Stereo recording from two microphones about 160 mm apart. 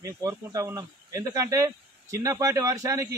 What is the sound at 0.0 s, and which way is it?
A man's voice, 20° right (ahead or behind).